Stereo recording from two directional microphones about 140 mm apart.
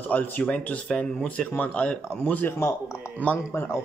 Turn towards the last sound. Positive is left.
turn(degrees=15)  # may be behind; listen again after turning